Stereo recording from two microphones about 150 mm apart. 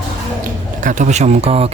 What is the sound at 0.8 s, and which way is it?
Speech, 55° right (ahead or behind).